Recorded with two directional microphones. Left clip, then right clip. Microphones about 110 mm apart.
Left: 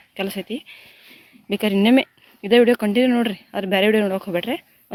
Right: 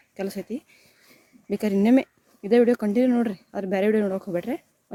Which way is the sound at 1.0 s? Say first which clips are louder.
Left 4 dB; 15° right (ahead or behind).